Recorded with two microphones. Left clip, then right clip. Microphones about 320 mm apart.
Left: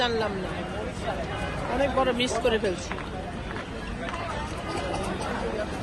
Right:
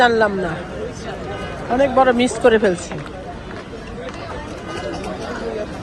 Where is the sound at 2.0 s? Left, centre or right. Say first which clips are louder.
Right 13 dB; right.